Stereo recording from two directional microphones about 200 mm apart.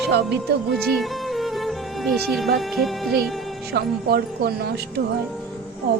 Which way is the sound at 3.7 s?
55° right (ahead or behind).